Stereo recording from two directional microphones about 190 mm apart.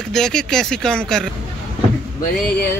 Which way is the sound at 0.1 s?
5° left (ahead or behind).